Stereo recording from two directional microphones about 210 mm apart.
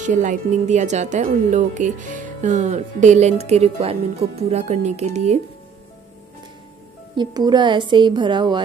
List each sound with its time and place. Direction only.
0.0 s speech: 35° right (ahead or behind)
7.2 s a woman's voice: 20° right (ahead or behind)